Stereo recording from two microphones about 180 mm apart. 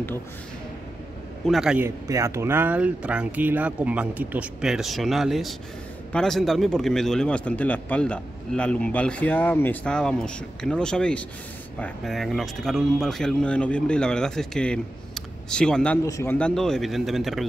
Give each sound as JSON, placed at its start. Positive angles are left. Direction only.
{"t": 1.5, "sound": "speech", "side_deg": -5}
{"t": 1.9, "sound": "speech", "side_deg": -15}
{"t": 16.1, "sound": "speech", "side_deg": 15}
{"t": 16.3, "sound": "speech", "side_deg": 5}